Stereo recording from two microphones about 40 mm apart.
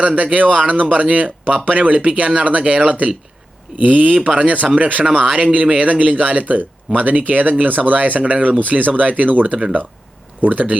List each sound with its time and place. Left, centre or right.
0.2 s speech: right
4.3 s speech: right